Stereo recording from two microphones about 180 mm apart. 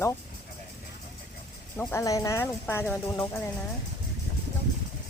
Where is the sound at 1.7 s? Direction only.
10° left (ahead or behind).